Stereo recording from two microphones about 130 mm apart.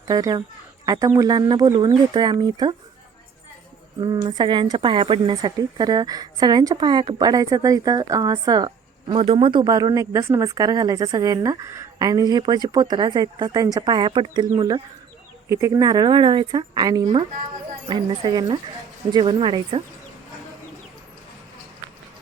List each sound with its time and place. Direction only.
0.1 s a woman's voice: 30° right (ahead or behind)
4.0 s a woman's voice: 30° right (ahead or behind)
9.1 s a woman's voice: 45° right (ahead or behind)
15.4 s a woman's voice: 20° right (ahead or behind); by 19.8 s 40° right (ahead or behind)